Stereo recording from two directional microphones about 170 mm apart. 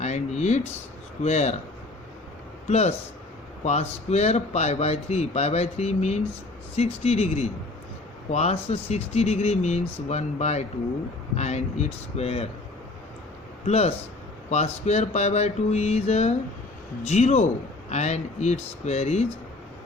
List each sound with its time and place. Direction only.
0.0 s a sound: 40° left (ahead or behind)
1.2 s a man's voice: 40° left (ahead or behind)
2.6 s a man's voice: 40° left (ahead or behind)
13.7 s a man's voice: 40° left (ahead or behind)